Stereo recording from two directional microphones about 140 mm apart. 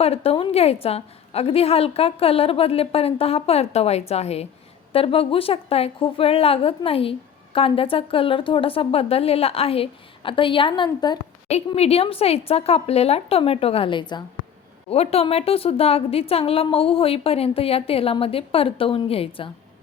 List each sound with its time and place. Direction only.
0.0 s a woman's voice: 45° left (ahead or behind)
11.4 s a woman's voice: 50° left (ahead or behind); by 14.3 s 30° left (ahead or behind)
14.8 s a woman's voice: 45° left (ahead or behind)